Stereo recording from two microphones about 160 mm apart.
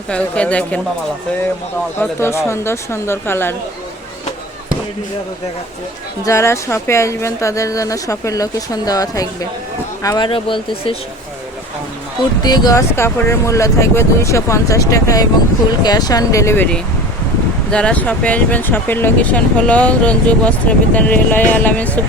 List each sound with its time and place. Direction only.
0.1 s speech: 5° left (ahead or behind)
2.0 s speech: 15° left (ahead or behind)
6.2 s speech: 15° left (ahead or behind); by 10.9 s 30° left (ahead or behind)
12.4 s speech: 25° left (ahead or behind)
17.7 s speech: 5° left (ahead or behind)